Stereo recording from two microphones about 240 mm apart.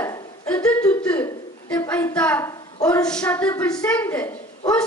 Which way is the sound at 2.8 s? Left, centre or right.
Centre.